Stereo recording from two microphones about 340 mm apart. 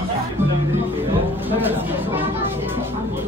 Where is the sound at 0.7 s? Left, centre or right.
Centre.